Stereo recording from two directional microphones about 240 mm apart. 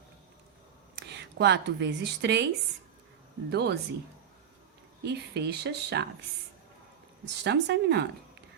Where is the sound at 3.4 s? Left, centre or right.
Right.